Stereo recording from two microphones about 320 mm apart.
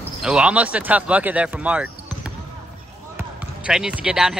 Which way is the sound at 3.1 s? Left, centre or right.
Centre.